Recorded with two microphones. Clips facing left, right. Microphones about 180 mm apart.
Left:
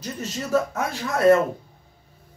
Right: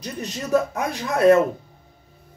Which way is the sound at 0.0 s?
15° right (ahead or behind).